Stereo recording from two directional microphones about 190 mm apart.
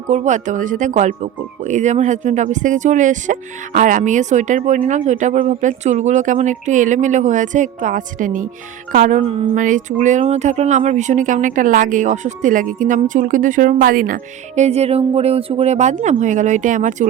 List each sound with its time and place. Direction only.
0.1 s speech: 40° right (ahead or behind)